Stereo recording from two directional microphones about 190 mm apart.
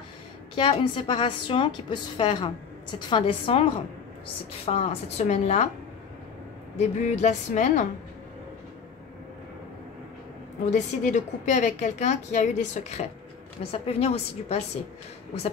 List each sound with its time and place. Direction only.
0.6 s a woman's voice: 25° left (ahead or behind)
6.8 s a woman's voice: 40° left (ahead or behind)
10.6 s a woman's voice: 40° left (ahead or behind)